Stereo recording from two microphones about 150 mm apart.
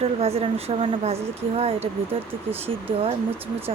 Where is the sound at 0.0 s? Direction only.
40° right (ahead or behind).